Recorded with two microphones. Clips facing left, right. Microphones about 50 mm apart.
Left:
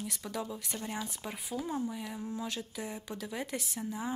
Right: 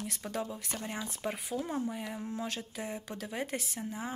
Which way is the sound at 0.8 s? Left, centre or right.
Right.